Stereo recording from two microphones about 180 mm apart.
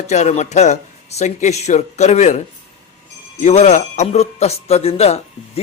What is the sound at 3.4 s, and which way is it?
Speech, 40° left (ahead or behind).